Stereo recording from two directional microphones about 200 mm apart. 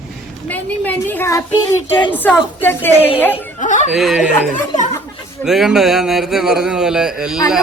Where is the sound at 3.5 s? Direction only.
40° left (ahead or behind).